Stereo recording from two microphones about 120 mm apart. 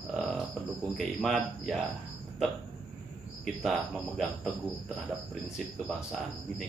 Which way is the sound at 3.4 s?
Centre (ahead or behind).